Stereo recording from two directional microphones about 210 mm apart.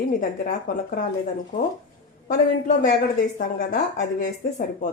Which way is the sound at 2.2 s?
40° left (ahead or behind).